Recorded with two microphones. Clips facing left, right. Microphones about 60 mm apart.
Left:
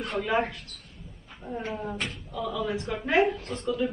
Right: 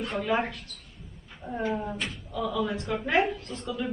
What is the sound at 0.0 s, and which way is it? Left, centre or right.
Speech, centre.